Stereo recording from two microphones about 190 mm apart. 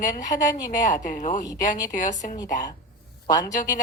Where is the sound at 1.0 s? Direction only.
45° left (ahead or behind).